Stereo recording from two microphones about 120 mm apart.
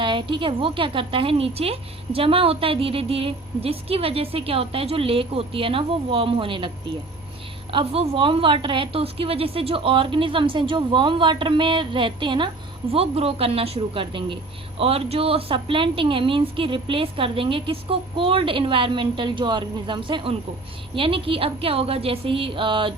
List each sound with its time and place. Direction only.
0.0 s a woman's voice: 45° right (ahead or behind)
7.7 s a woman's voice: 50° right (ahead or behind)
12.9 s a woman's voice: 55° right (ahead or behind)